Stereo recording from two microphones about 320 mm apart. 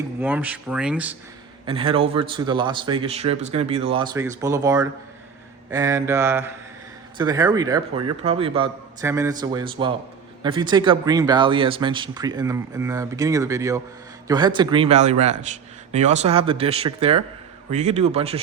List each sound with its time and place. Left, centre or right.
0.2 s speech: centre
1.6 s a man's voice: centre